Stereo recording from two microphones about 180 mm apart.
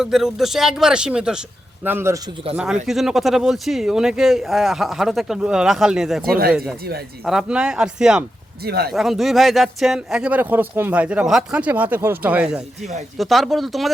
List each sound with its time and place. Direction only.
0.0 s speech: centre (ahead or behind)
2.6 s speech: 5° right (ahead or behind)
8.6 s speech: 60° right (ahead or behind)
8.9 s speech: centre (ahead or behind)